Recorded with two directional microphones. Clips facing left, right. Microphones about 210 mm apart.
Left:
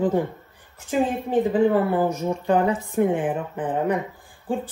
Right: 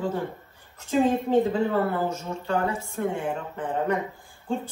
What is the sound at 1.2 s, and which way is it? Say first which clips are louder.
Speech: left 3 dB; 15° left (ahead or behind).